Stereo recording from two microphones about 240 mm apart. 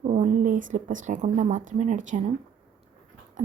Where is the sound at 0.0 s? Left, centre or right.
Right.